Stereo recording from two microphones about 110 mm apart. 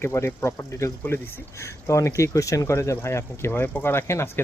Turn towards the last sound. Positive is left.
turn(degrees=25)  # may be behind; listen again after turning